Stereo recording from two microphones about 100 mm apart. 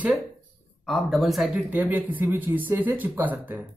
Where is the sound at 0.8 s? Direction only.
Centre (ahead or behind).